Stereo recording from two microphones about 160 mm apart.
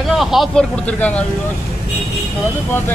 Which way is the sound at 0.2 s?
Centre (ahead or behind).